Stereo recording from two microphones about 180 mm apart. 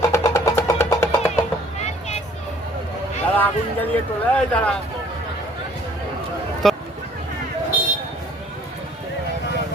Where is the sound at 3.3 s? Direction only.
10° left (ahead or behind).